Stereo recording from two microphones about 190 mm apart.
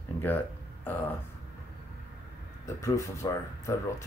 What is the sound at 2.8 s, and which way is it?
Speech, 15° left (ahead or behind).